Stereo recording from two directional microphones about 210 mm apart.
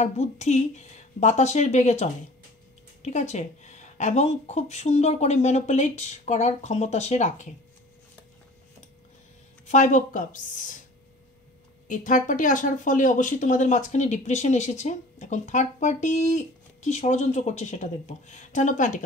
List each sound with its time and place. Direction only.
0.0 s speech: 35° left (ahead or behind)
9.7 s speech: 35° left (ahead or behind)
11.9 s speech: 40° left (ahead or behind)